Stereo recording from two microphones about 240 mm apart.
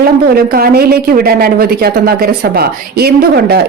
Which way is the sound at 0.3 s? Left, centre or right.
Right.